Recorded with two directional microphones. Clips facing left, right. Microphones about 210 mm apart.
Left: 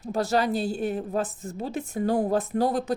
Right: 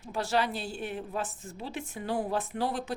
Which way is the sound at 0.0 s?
40° left (ahead or behind).